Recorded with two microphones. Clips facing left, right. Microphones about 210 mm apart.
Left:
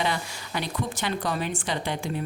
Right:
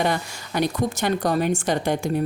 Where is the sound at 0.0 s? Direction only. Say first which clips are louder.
Right 5 dB; 45° right (ahead or behind).